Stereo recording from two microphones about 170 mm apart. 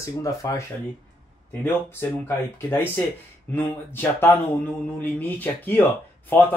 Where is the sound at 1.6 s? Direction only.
15° left (ahead or behind).